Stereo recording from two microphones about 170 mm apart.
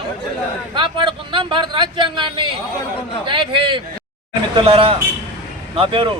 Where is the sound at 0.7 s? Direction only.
30° right (ahead or behind).